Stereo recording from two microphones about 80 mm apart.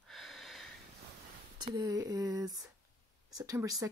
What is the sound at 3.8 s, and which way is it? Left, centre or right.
Speech, right.